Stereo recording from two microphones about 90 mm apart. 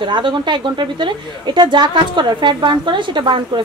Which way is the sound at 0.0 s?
60° right (ahead or behind).